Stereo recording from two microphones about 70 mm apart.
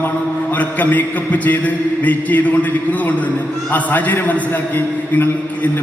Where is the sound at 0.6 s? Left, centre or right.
Left.